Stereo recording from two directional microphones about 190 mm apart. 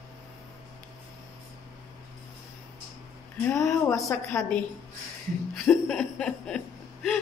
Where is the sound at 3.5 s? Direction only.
15° left (ahead or behind).